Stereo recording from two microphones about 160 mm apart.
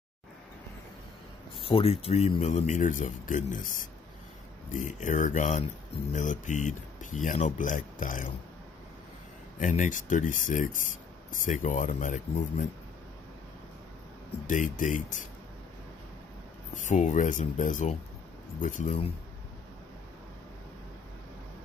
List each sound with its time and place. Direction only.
1.6 s speech: 35° left (ahead or behind); by 8.3 s 55° left (ahead or behind)
9.6 s speech: 55° left (ahead or behind)
14.5 s speech: 50° left (ahead or behind)
16.7 s speech: 50° left (ahead or behind)